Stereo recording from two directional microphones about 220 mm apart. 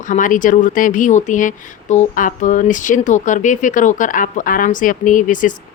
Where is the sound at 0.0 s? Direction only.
35° left (ahead or behind).